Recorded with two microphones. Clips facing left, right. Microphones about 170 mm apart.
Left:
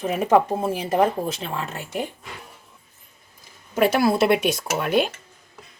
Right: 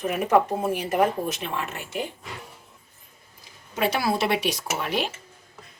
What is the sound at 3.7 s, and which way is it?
Speech, 50° left (ahead or behind).